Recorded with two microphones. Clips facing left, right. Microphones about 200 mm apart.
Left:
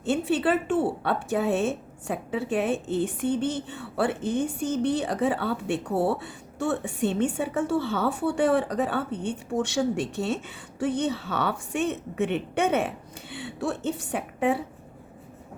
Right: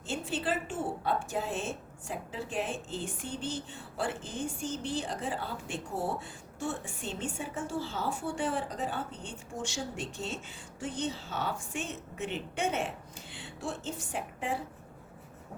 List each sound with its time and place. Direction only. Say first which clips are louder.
0.0 s a woman's voice: left 10 dB; 65° left (ahead or behind)